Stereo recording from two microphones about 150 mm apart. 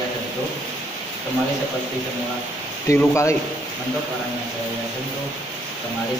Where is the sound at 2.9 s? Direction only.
20° left (ahead or behind).